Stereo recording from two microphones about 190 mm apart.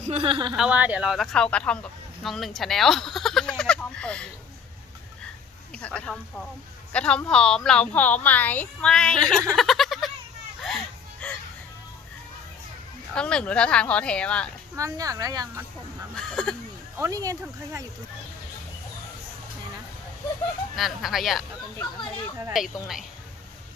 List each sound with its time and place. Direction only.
0.1 s speech: 30° right (ahead or behind)
0.5 s speech: 5° right (ahead or behind)
3.6 s a sound: 5° left (ahead or behind)
5.7 s speech: 5° left (ahead or behind)
9.6 s a sound: centre (ahead or behind)
11.2 s music: 5° left (ahead or behind)
13.1 s speech: 5° left (ahead or behind)
14.8 s speech: 20° right (ahead or behind)
16.1 s speech: 5° left (ahead or behind)
17.0 s speech: 20° right (ahead or behind)
20.7 s speech: centre (ahead or behind)
22.5 s speech: centre (ahead or behind)